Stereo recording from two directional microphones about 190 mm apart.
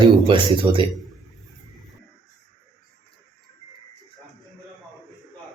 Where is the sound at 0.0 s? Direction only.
25° right (ahead or behind).